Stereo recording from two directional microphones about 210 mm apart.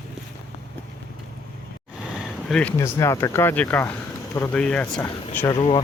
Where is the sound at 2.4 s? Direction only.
5° left (ahead or behind).